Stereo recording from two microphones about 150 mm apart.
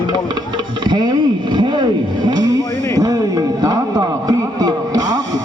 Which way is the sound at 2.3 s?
25° right (ahead or behind).